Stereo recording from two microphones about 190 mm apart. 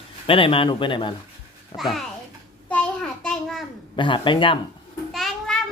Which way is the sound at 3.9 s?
25° left (ahead or behind).